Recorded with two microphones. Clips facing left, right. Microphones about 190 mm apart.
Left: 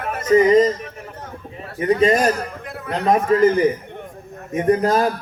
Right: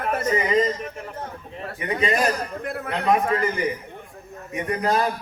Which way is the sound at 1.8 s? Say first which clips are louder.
Left 7 dB; 45° left (ahead or behind).